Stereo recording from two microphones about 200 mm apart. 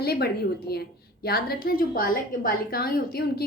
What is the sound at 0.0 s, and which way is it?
A woman's voice, 50° left (ahead or behind).